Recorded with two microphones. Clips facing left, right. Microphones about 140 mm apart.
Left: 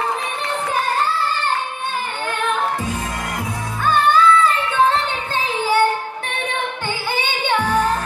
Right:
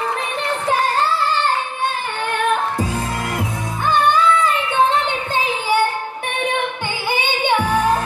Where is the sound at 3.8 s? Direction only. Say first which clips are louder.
Left 1 dB; 20° right (ahead or behind).